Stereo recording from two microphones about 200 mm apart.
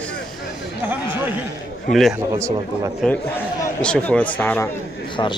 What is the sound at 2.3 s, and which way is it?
Speech, 15° right (ahead or behind).